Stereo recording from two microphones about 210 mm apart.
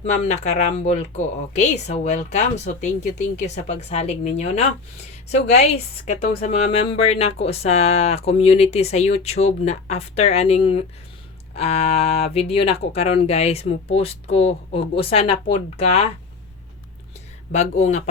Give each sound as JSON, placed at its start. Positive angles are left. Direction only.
{"t": 0.0, "sound": "a woman's voice", "side_deg": 30}
{"t": 17.5, "sound": "speech", "side_deg": 35}